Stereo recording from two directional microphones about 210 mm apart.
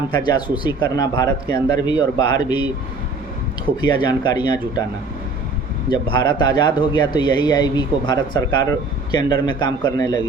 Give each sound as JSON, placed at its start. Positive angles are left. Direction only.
{"t": 0.1, "sound": "speech", "side_deg": 20}
{"t": 3.8, "sound": "speech", "side_deg": 20}
{"t": 5.9, "sound": "speech", "side_deg": 20}